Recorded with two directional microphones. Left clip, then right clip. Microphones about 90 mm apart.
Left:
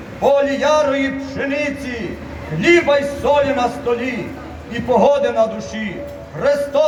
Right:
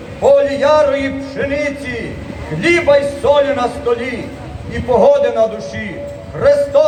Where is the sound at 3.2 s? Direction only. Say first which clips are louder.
Right 3 dB; 10° right (ahead or behind).